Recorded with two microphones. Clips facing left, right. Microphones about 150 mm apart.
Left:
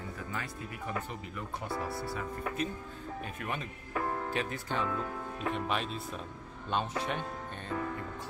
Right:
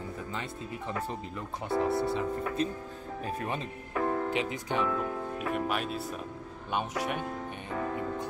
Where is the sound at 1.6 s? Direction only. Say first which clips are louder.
Right 10 dB; 25° right (ahead or behind).